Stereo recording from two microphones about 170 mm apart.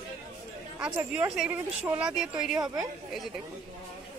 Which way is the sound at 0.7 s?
5° right (ahead or behind).